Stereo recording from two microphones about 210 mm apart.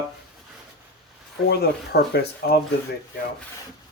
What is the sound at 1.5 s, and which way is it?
Speech, 50° left (ahead or behind).